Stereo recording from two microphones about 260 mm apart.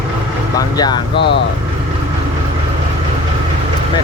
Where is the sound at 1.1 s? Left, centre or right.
Left.